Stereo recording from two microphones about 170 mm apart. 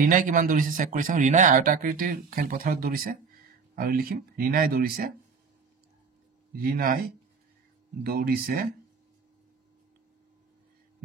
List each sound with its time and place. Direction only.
0.0 s speech: 55° right (ahead or behind)
6.5 s speech: 65° right (ahead or behind)
8.0 s speech: 65° right (ahead or behind)